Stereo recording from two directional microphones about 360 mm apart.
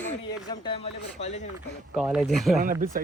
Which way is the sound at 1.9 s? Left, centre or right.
Centre.